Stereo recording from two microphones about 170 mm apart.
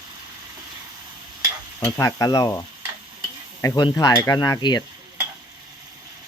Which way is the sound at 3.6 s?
25° left (ahead or behind).